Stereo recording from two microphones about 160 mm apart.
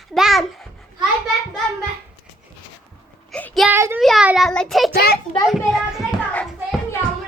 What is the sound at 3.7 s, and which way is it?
Child singing, 15° right (ahead or behind).